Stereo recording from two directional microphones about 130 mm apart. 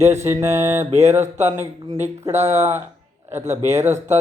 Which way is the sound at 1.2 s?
60° right (ahead or behind).